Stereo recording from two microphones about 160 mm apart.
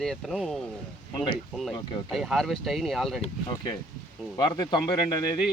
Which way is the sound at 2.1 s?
Centre (ahead or behind).